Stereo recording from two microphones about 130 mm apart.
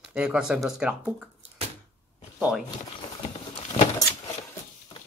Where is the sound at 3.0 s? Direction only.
45° left (ahead or behind).